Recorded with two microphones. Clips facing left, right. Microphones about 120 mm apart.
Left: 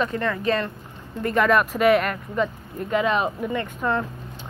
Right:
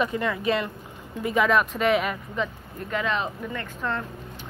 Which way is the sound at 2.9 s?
15° left (ahead or behind).